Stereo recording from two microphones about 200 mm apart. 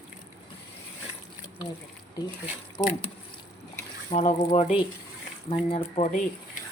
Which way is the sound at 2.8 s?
25° left (ahead or behind).